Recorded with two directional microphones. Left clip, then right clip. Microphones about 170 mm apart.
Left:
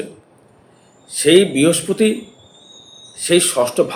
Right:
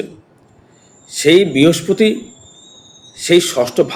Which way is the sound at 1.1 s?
20° right (ahead or behind).